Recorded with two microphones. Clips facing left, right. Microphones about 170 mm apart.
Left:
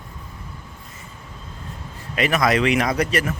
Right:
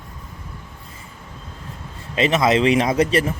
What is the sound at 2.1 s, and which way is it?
Speech, 25° right (ahead or behind).